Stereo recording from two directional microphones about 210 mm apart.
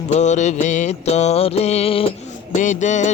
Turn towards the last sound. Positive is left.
turn(degrees=35)  # may be behind; listen again after turning